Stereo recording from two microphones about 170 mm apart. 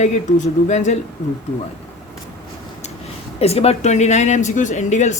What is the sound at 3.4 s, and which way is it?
Speech, 35° left (ahead or behind).